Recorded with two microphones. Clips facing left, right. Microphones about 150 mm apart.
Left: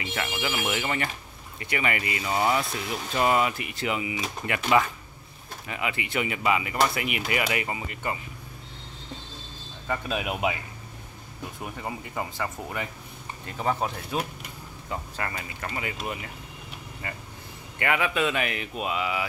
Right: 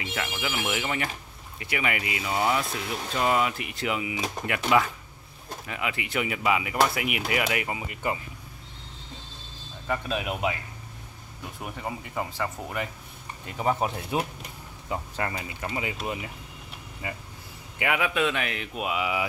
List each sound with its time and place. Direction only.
0.0 s speech: centre (ahead or behind)
9.8 s speech: 5° left (ahead or behind)
11.6 s speech: centre (ahead or behind)
13.6 s speech: 15° right (ahead or behind); by 18.7 s 5° left (ahead or behind)
18.8 s speech: 10° right (ahead or behind)